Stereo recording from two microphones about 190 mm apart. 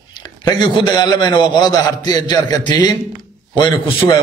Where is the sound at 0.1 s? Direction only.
20° left (ahead or behind).